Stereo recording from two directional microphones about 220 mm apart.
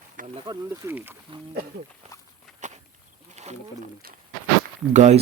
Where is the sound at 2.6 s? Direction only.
35° right (ahead or behind).